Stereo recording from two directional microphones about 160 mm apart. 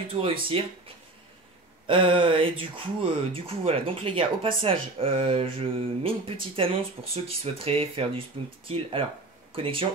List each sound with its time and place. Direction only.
0.1 s speech: 35° right (ahead or behind)